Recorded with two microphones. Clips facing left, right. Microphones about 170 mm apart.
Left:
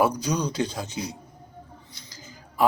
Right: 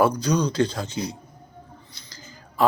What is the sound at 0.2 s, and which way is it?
Speech, 15° left (ahead or behind).